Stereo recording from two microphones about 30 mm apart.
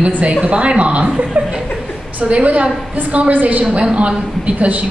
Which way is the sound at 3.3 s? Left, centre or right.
Right.